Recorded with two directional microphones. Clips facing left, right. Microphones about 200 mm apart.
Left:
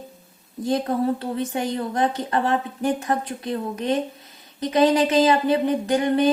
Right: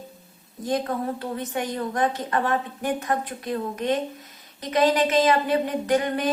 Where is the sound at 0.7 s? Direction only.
30° left (ahead or behind).